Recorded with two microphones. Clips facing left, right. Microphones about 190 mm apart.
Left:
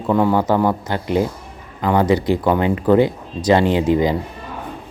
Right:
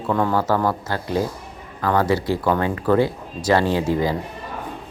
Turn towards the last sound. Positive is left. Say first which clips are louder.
# left 4 dB
turn(degrees=20)  # may be behind; listen again after turning